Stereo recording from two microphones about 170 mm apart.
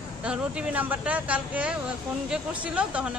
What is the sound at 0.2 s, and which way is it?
Speech, 5° right (ahead or behind).